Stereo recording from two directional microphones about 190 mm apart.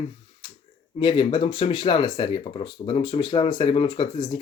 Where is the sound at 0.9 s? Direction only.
25° left (ahead or behind).